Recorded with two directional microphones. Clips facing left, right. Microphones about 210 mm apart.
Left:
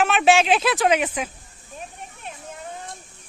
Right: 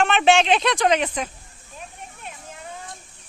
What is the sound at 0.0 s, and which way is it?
Speech, 5° left (ahead or behind).